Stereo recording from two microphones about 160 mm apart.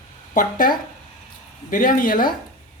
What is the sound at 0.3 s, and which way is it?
Speech, 60° left (ahead or behind).